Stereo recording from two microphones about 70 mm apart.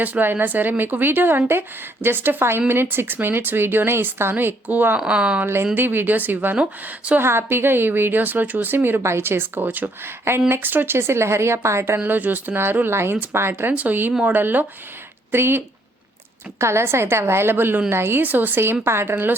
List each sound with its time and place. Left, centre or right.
0.0 s a woman's voice: right
4.9 s speech: centre
5.7 s speech: right
7.2 s a woman's voice: right
12.0 s a woman's voice: right